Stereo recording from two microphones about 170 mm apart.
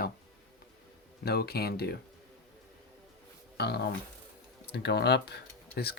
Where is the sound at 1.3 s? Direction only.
65° left (ahead or behind).